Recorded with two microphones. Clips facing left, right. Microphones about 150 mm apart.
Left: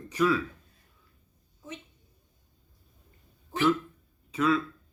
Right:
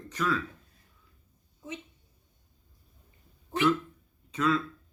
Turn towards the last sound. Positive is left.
turn(degrees=5)  # may be behind; listen again after turning